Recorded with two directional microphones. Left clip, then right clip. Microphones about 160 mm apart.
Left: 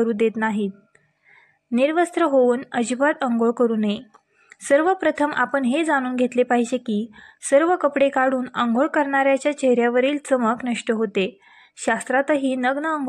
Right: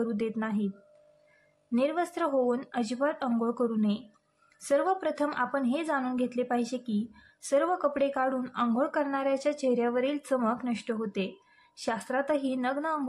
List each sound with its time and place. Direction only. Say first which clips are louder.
0.0 s a woman's voice: left 12 dB; 35° left (ahead or behind)
1.8 s a woman's voice: left 10 dB; 35° left (ahead or behind)